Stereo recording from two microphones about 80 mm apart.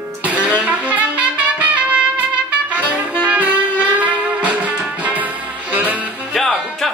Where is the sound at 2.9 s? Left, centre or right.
Centre.